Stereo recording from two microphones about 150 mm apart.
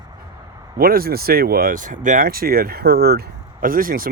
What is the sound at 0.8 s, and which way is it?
Speech, 80° right.